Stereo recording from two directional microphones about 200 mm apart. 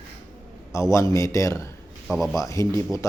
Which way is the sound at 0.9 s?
15° left (ahead or behind).